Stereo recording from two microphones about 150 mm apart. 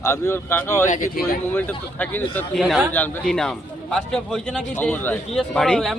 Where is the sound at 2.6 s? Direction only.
Centre (ahead or behind).